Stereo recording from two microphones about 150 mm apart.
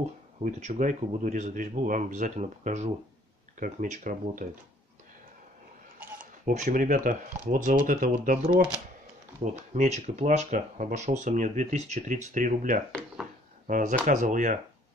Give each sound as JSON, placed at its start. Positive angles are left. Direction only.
{"t": 0.4, "sound": "speech", "side_deg": -50}
{"t": 6.4, "sound": "speech", "side_deg": -65}
{"t": 9.4, "sound": "speech", "side_deg": -50}